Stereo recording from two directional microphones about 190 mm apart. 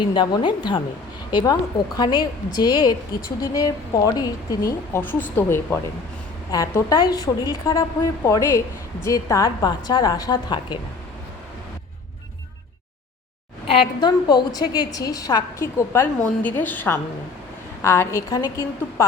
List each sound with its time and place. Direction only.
0.0 s a woman's voice: 25° left (ahead or behind)
13.7 s a woman's voice: 25° left (ahead or behind)